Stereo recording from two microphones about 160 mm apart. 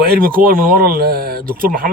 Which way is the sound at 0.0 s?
65° right (ahead or behind).